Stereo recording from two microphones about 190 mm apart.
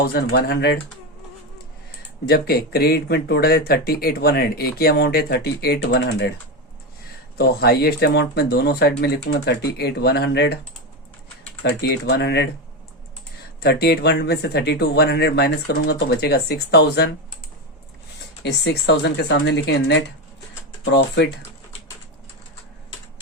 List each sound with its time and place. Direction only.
0.0 s speech: 60° left (ahead or behind)
2.5 s speech: 55° left (ahead or behind)
7.3 s speech: 55° left (ahead or behind)
11.7 s speech: 65° left (ahead or behind)
13.6 s speech: 55° left (ahead or behind)
18.4 s speech: 60° left (ahead or behind)